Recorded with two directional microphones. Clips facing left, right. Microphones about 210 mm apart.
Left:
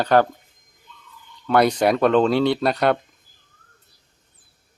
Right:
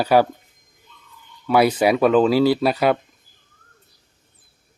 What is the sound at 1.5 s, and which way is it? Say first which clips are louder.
Speech: right 1 dB; 5° right (ahead or behind).